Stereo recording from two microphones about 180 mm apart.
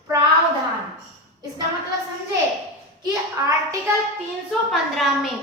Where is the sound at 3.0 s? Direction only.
20° right (ahead or behind).